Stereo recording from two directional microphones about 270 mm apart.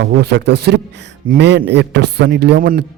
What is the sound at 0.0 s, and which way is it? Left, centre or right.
Speech, right.